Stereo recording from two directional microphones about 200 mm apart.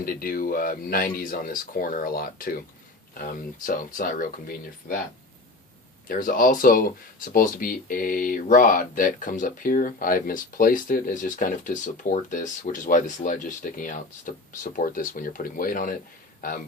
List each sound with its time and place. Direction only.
0.0 s speech: 45° left (ahead or behind)
6.1 s speech: 45° left (ahead or behind)